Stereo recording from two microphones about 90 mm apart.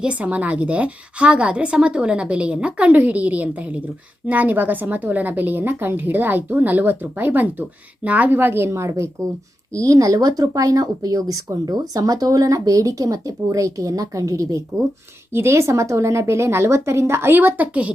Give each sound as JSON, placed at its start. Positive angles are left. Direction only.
{"t": 0.0, "sound": "a woman's voice", "side_deg": -15}